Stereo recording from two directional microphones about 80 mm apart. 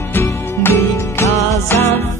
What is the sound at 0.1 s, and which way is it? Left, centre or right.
Music, left.